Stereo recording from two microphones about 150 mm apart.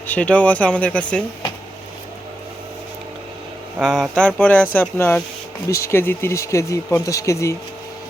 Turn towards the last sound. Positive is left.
turn(degrees=20)  # may be behind; listen again after turning